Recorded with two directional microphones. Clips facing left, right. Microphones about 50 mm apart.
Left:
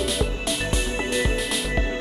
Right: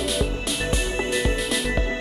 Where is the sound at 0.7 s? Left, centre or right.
Centre.